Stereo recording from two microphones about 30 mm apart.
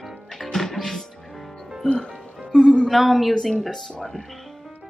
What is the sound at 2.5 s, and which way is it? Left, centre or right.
Speech, left.